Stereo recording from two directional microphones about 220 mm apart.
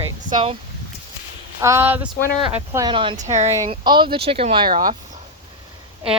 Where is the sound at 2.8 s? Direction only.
20° right (ahead or behind).